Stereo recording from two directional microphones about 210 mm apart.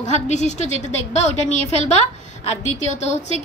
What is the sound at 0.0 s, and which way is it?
A woman's voice, 35° left (ahead or behind).